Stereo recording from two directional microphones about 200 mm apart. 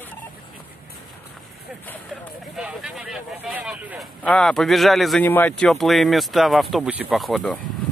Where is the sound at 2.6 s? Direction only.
5° right (ahead or behind).